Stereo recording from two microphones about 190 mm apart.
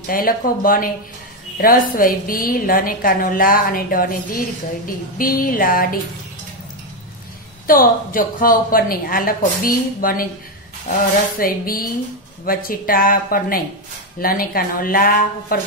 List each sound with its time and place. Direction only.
0.0 s a woman's voice: 50° left (ahead or behind)
7.6 s a woman's voice: 50° left (ahead or behind)
11.3 s a woman's voice: 50° left (ahead or behind)